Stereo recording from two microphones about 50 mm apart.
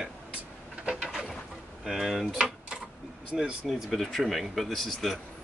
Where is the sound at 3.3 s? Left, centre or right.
Centre.